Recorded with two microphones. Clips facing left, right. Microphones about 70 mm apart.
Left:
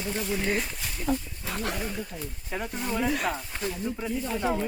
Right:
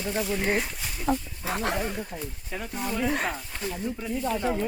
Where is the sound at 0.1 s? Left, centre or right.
Centre.